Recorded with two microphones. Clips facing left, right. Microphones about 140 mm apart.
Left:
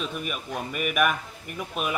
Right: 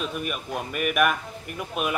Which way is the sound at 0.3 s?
Centre (ahead or behind).